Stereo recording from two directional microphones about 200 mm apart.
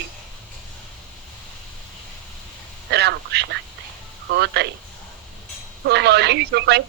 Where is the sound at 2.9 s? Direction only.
60° right (ahead or behind).